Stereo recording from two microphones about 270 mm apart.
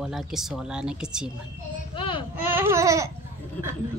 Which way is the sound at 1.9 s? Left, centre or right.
Centre.